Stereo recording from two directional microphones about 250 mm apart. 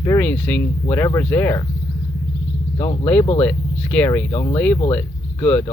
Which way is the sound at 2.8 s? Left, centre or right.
Left.